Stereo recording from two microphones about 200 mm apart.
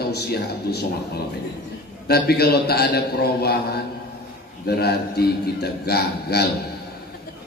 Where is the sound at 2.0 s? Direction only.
50° left (ahead or behind).